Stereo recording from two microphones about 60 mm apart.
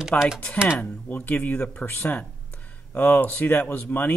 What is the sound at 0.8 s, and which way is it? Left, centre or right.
Speech, left.